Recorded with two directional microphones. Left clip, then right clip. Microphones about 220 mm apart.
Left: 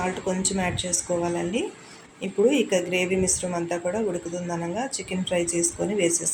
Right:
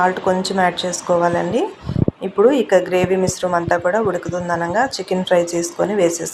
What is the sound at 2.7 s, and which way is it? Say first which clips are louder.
Speech: right 9 dB; 40° right (ahead or behind).